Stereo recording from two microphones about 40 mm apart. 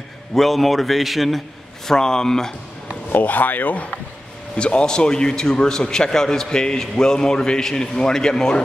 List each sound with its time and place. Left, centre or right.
0.3 s a man's voice: centre
1.9 s speech: centre
3.1 s speech: left
4.6 s a man's voice: left